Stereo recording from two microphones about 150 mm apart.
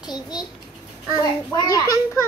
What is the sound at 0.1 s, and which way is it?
A child's voice, 30° left (ahead or behind).